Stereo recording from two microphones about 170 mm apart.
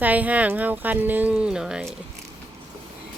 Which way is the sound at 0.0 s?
10° right (ahead or behind).